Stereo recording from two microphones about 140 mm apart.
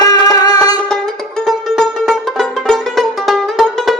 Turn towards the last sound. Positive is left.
turn(degrees=0)  # may be behind; listen again after turning